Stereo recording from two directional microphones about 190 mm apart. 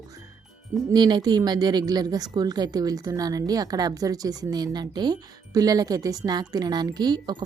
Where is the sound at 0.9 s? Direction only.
20° right (ahead or behind).